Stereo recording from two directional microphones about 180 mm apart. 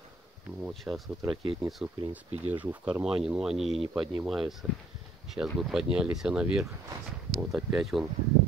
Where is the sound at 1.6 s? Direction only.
20° right (ahead or behind).